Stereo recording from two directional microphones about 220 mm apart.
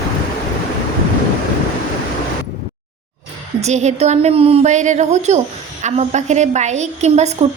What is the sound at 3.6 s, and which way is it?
A woman's voice, 30° right (ahead or behind).